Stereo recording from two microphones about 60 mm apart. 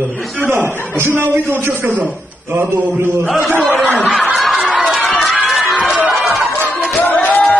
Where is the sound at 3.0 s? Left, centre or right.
Right.